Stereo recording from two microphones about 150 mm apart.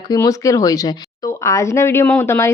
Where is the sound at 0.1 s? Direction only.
20° left (ahead or behind).